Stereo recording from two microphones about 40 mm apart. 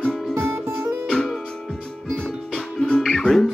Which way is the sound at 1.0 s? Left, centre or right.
Centre.